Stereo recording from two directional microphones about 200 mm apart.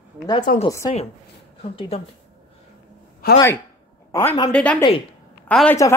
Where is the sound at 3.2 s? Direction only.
50° left (ahead or behind).